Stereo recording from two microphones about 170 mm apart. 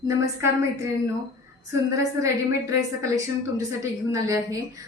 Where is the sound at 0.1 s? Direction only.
15° right (ahead or behind).